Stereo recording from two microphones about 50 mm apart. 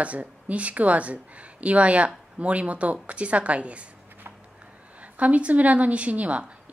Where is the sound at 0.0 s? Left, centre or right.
Right.